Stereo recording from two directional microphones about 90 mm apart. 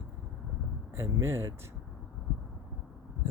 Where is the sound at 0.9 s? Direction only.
30° right (ahead or behind).